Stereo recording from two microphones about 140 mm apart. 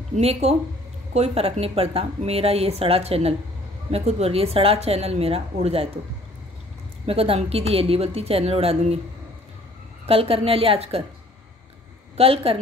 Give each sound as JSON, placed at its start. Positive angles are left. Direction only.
{"t": 0.1, "sound": "a woman's voice", "side_deg": -50}
{"t": 7.1, "sound": "a woman's voice", "side_deg": -40}
{"t": 10.0, "sound": "a woman's voice", "side_deg": -45}
{"t": 12.2, "sound": "a woman's voice", "side_deg": -40}